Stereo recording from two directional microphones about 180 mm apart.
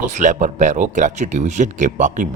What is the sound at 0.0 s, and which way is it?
Speech, 45° right (ahead or behind).